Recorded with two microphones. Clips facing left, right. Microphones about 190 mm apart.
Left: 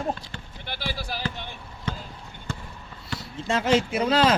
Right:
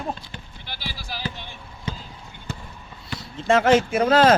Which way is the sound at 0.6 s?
55° left (ahead or behind).